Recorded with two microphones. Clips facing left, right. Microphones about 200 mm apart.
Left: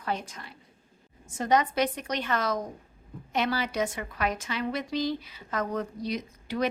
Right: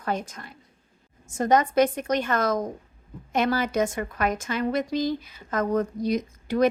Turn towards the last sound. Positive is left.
turn(degrees=-45)  # may be behind; listen again after turning